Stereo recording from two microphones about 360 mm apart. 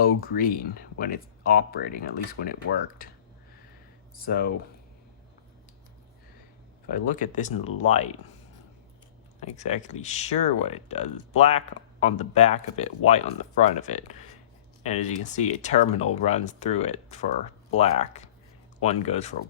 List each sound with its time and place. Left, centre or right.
0.0 s speech: left
4.2 s speech: left
7.2 s speech: left
9.4 s speech: centre